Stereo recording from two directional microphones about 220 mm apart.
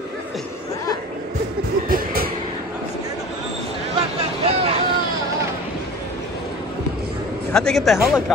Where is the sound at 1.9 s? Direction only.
40° right (ahead or behind).